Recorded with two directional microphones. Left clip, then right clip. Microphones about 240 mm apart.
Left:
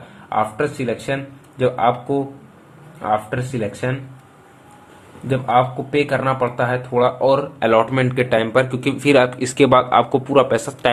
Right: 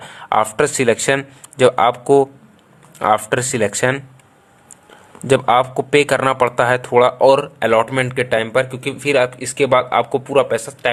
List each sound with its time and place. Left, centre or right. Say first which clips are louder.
0.3 s speech: right 4 dB; right
5.3 s speech: right 3 dB; right; by 10.9 s centre